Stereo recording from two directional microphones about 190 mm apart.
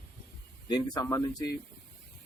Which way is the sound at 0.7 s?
20° left (ahead or behind).